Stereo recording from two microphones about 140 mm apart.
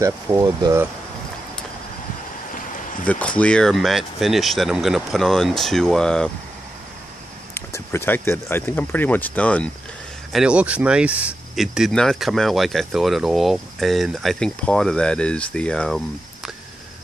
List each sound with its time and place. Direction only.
0.0 s speech: 25° right (ahead or behind)
3.1 s speech: 10° left (ahead or behind)
7.5 s speech: 20° left (ahead or behind)
10.3 s speech: 5° right (ahead or behind)